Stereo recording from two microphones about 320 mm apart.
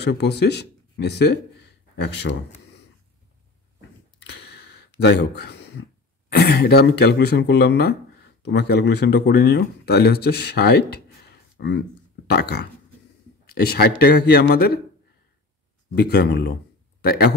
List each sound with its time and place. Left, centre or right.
0.0 s speech: left
4.2 s a sound: left
6.3 s a man's voice: left
15.9 s a man's voice: left